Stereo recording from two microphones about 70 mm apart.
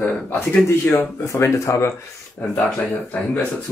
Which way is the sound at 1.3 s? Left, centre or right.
Left.